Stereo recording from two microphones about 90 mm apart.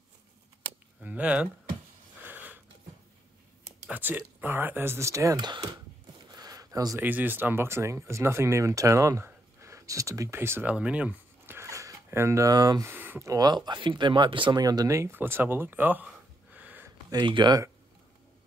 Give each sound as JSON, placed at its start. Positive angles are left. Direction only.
{"t": 1.0, "sound": "speech", "side_deg": -15}
{"t": 2.2, "sound": "a sound", "side_deg": -20}
{"t": 3.9, "sound": "speech", "side_deg": -20}
{"t": 5.4, "sound": "speech", "side_deg": -55}
{"t": 6.3, "sound": "a sound", "side_deg": -45}
{"t": 7.0, "sound": "speech", "side_deg": -20}
{"t": 10.7, "sound": "speech", "side_deg": -15}
{"t": 11.5, "sound": "a sound", "side_deg": -35}
{"t": 12.8, "sound": "speech", "side_deg": -20}
{"t": 13.3, "sound": "speech", "side_deg": -50}
{"t": 14.5, "sound": "speech", "side_deg": -45}
{"t": 16.5, "sound": "a sound", "side_deg": -20}
{"t": 17.1, "sound": "speech", "side_deg": -60}